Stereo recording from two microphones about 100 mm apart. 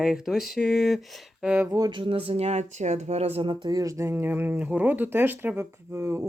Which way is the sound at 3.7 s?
35° right (ahead or behind).